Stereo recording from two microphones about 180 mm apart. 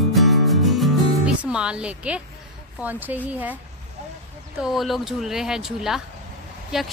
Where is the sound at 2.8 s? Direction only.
10° right (ahead or behind).